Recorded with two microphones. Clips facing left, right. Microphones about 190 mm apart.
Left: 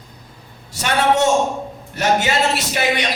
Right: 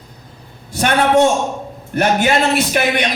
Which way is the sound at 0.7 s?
55° right (ahead or behind).